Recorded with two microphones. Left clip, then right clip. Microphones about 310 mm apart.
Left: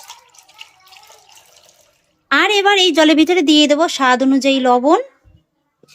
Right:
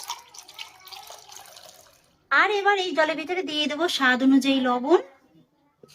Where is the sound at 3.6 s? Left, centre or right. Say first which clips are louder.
Left 9 dB; centre.